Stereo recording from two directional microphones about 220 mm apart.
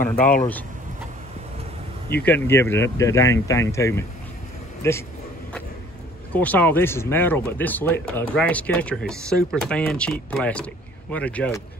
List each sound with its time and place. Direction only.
0.1 s speech: 40° left (ahead or behind)
2.2 s speech: 10° left (ahead or behind)
6.3 s speech: 5° left (ahead or behind)